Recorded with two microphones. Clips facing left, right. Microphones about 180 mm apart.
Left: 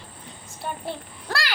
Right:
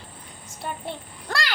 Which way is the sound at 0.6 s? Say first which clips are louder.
Left 1 dB; 5° left (ahead or behind).